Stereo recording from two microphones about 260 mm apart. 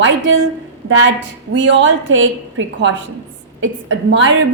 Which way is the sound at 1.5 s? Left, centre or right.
Right.